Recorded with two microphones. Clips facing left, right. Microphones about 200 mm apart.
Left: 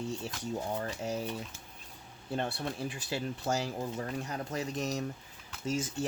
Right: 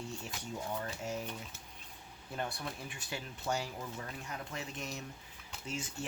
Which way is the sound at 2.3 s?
30° left (ahead or behind).